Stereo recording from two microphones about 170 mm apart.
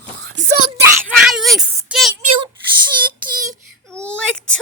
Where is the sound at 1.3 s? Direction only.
Centre (ahead or behind).